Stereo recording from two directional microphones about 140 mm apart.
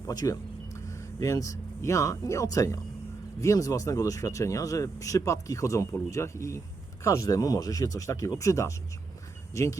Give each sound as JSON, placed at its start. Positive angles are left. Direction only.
{"t": 0.1, "sound": "speech", "side_deg": 25}